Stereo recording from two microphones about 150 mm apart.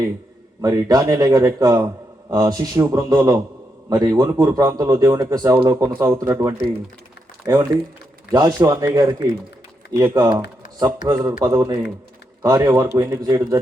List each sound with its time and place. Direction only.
0.6 s a man's voice: 25° right (ahead or behind)